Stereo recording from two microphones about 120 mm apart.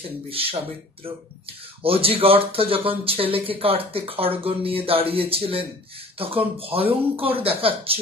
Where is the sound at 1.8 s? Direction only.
50° right (ahead or behind).